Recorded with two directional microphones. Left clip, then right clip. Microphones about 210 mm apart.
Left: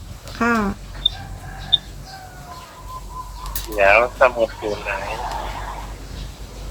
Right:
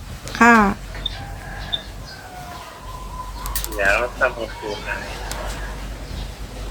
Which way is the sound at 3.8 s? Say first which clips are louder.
Left 5 dB; 50° left (ahead or behind).